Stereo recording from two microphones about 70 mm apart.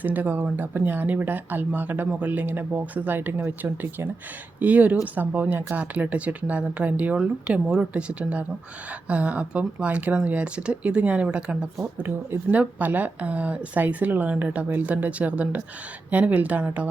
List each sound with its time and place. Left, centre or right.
0.0 s speech: right